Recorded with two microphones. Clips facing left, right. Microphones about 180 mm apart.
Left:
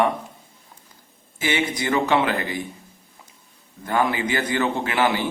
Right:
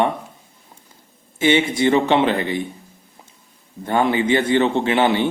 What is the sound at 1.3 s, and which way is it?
Speech, 25° right (ahead or behind).